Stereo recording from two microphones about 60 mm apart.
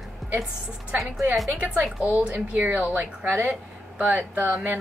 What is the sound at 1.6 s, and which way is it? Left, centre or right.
A woman's voice, right.